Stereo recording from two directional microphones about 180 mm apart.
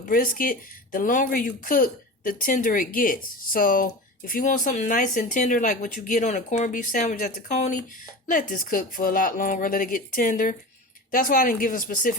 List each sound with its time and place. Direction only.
0.1 s speech: 50° left (ahead or behind)